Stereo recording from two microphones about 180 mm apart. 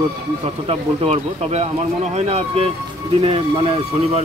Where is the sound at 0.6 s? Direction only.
35° right (ahead or behind).